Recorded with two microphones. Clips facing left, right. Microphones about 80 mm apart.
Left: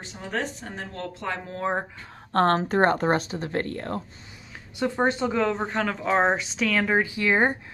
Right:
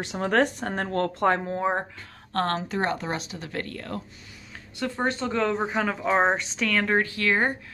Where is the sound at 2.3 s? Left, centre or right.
Left.